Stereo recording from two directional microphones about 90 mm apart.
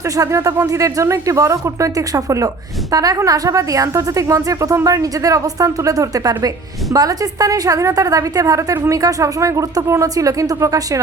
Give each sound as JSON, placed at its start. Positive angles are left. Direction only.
{"t": 0.0, "sound": "a woman's voice", "side_deg": -35}